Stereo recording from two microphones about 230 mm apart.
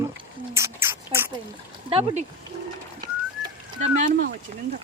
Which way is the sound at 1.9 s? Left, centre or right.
Right.